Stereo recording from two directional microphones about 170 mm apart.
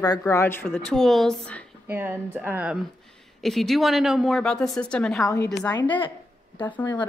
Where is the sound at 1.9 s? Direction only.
10° right (ahead or behind); by 5.2 s 5° left (ahead or behind).